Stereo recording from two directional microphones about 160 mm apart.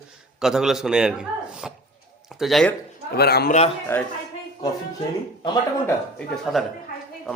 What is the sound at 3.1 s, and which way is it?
Speech, 85° left.